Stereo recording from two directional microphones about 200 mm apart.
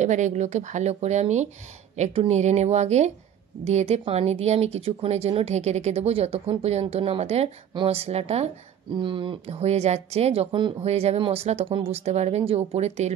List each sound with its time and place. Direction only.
0.0 s speech: 35° right (ahead or behind)